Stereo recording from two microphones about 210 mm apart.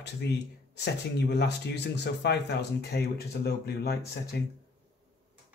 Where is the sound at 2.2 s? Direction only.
50° left (ahead or behind).